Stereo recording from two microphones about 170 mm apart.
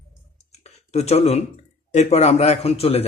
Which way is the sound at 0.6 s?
40° left (ahead or behind).